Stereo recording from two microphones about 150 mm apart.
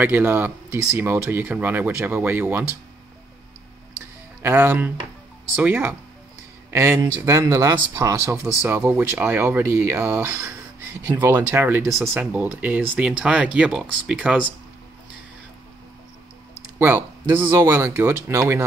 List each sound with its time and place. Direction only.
0.0 s speech: 10° right (ahead or behind)
4.4 s speech: 15° right (ahead or behind)
16.7 s speech: 15° right (ahead or behind)